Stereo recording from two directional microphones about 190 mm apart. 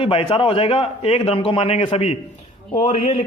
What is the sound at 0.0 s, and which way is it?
A man's voice, 30° left (ahead or behind).